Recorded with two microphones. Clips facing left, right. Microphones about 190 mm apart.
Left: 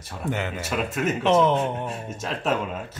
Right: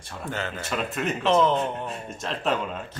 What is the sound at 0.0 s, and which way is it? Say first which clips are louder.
Speech: left 3 dB; 5° left (ahead or behind).